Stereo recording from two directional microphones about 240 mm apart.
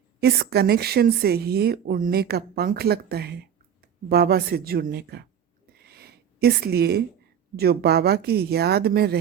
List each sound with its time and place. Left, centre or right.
0.2 s speech: right
5.8 s a sound: right
7.5 s speech: right